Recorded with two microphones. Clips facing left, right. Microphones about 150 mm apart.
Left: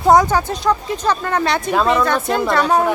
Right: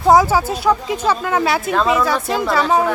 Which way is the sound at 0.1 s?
5° right (ahead or behind).